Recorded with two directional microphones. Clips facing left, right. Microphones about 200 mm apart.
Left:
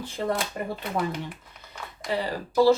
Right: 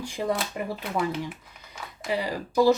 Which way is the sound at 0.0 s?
15° right (ahead or behind).